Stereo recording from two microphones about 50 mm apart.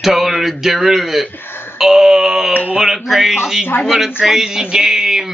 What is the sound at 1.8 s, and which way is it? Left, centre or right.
Speech, centre.